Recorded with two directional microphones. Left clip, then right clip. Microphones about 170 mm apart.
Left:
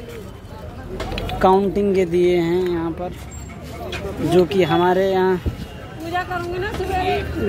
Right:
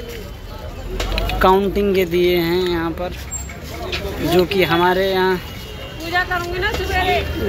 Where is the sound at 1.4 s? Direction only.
15° left (ahead or behind).